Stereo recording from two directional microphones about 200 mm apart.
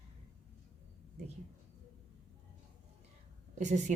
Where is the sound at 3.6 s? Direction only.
35° right (ahead or behind).